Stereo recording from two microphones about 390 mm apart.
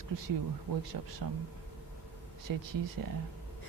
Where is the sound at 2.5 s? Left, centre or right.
Right.